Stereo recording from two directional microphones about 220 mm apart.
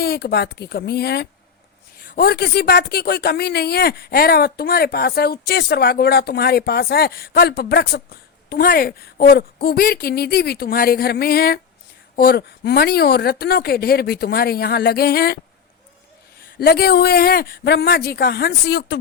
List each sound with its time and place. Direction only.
0.0 s a woman's voice: 45° left (ahead or behind)
16.6 s a woman's voice: 45° left (ahead or behind)